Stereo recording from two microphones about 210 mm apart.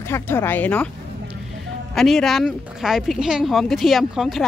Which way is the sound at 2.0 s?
Centre (ahead or behind).